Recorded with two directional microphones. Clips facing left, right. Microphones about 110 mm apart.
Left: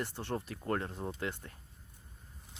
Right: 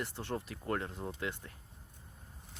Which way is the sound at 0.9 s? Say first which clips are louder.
Left 2 dB; 10° left (ahead or behind).